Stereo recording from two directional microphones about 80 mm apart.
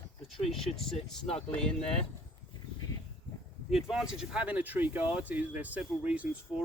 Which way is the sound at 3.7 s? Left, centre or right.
Centre.